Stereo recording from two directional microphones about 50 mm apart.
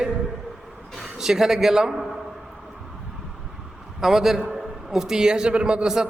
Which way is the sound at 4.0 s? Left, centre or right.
Centre.